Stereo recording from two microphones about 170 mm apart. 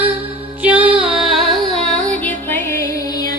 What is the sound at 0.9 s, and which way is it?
Music, centre (ahead or behind).